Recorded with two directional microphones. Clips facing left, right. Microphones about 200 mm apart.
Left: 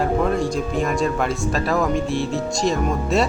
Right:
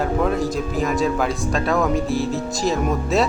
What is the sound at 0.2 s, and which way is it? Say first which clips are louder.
Speech: even; centre (ahead or behind).